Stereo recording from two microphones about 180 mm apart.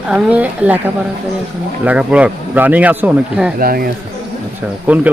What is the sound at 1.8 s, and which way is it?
Speech, 5° right (ahead or behind).